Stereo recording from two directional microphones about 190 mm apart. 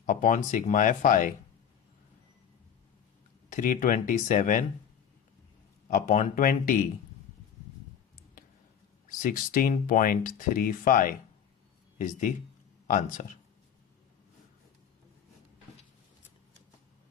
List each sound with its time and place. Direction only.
0.0 s speech: 45° left (ahead or behind)
3.5 s speech: 45° left (ahead or behind)
5.9 s speech: 40° left (ahead or behind)
9.0 s speech: 45° left (ahead or behind)